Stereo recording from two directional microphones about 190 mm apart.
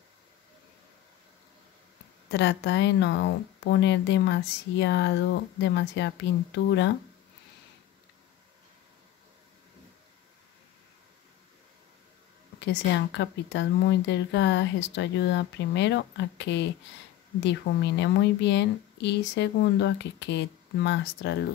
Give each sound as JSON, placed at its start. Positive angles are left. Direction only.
{"t": 2.3, "sound": "speech", "side_deg": 65}
{"t": 12.5, "sound": "a woman's voice", "side_deg": 65}